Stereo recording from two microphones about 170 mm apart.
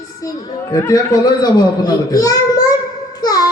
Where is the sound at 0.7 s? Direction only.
20° left (ahead or behind).